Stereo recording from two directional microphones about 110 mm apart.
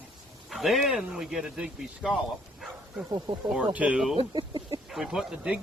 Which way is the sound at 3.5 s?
10° right (ahead or behind).